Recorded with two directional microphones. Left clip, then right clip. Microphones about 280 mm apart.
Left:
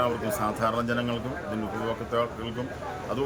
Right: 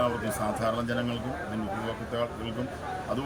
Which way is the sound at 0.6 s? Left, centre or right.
Centre.